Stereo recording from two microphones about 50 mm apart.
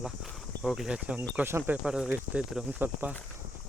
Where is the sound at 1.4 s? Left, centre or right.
Right.